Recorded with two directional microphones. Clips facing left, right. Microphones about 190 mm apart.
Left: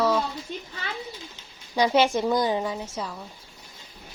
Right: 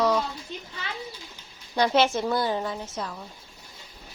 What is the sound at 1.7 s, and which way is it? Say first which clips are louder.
A woman's voice: left 1 dB; 10° left (ahead or behind).